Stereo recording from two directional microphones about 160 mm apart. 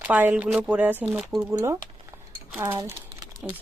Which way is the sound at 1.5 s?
20° right (ahead or behind).